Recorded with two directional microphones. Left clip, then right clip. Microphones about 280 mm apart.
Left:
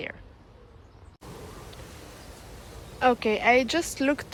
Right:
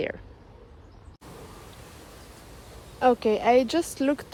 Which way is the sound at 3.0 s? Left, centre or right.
Centre.